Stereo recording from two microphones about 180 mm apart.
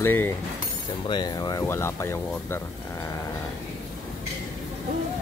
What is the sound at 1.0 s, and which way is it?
Speech, 25° left (ahead or behind).